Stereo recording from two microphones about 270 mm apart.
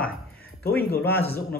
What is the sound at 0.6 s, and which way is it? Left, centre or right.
Speech, left.